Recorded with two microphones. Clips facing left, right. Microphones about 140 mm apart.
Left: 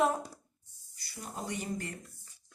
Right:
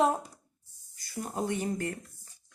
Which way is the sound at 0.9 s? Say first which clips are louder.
Right 8 dB; 45° right (ahead or behind).